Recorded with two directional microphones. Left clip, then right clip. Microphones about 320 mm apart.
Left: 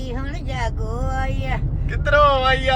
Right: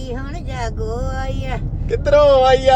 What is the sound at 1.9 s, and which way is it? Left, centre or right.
Speech, centre.